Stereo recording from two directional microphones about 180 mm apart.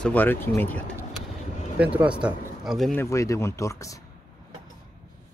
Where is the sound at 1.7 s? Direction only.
10° right (ahead or behind).